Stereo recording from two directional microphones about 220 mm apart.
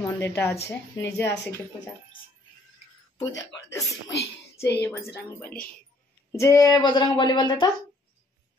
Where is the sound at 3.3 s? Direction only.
55° left (ahead or behind).